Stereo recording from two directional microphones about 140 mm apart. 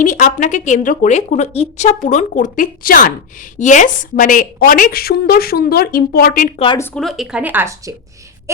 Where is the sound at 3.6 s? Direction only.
65° left (ahead or behind); by 6.5 s 85° left.